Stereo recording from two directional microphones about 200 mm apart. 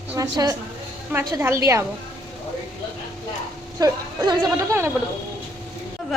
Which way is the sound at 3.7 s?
20° right (ahead or behind).